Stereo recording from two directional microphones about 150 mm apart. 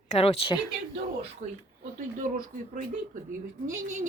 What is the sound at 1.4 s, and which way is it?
Speech, 45° right (ahead or behind).